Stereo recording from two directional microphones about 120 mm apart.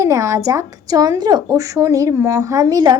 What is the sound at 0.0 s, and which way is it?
Speech, 25° right (ahead or behind).